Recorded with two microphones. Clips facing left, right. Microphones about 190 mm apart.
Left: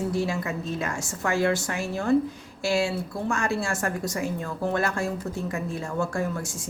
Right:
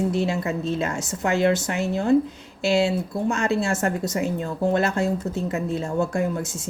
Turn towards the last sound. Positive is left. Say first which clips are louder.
# right 4 dB
turn(degrees=-20)  # may be behind; listen again after turning